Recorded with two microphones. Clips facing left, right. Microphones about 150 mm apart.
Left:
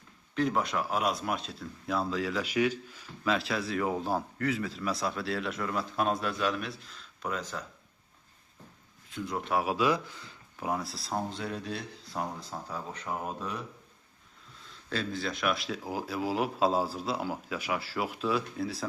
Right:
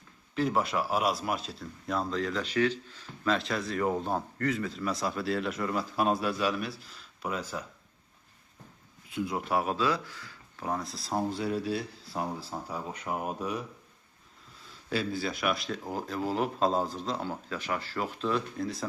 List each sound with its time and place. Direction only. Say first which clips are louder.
0.3 s a man's voice: right 1 dB; 5° right (ahead or behind)
9.0 s a man's voice: right 2 dB; 5° right (ahead or behind)
9.7 s speech: left 2 dB; 15° left (ahead or behind)
10.7 s a man's voice: even; 5° left (ahead or behind)
14.8 s a man's voice: right 2 dB; 5° right (ahead or behind)